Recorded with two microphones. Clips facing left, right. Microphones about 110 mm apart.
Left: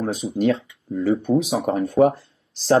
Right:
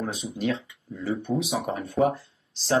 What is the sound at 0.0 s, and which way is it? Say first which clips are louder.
Speech: left 8 dB; 40° left (ahead or behind).